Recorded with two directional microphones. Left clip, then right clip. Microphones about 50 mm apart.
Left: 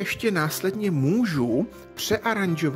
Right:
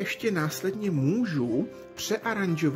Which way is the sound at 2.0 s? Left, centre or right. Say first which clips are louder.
Left 4 dB; left.